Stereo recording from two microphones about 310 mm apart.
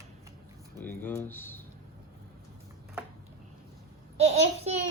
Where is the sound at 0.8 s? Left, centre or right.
Centre.